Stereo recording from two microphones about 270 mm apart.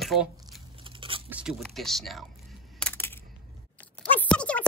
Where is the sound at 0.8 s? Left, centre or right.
Centre.